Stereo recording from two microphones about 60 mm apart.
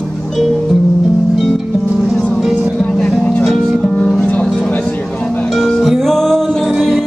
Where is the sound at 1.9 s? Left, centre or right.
Centre.